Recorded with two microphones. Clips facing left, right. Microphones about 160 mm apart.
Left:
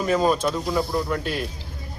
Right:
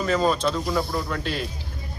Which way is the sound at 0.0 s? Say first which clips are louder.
Left 1 dB; 10° left (ahead or behind).